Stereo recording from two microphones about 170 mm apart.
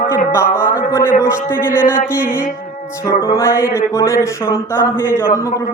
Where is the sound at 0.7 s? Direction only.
55° left (ahead or behind).